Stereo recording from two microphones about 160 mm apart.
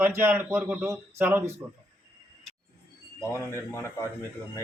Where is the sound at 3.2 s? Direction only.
15° left (ahead or behind).